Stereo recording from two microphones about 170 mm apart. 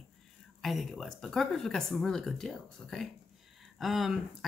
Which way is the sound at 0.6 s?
Centre (ahead or behind).